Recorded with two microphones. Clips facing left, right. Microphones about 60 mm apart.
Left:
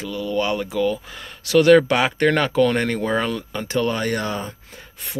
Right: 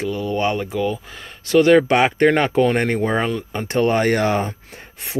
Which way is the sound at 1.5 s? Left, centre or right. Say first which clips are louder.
Even; centre.